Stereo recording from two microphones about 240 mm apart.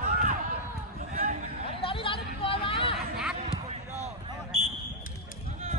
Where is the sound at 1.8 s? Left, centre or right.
Left.